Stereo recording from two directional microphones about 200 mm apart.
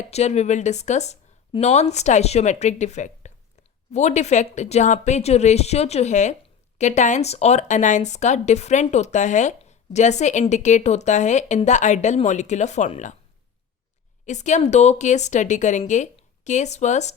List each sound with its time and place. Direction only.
0.1 s speech: 35° left (ahead or behind)
14.3 s speech: 35° left (ahead or behind)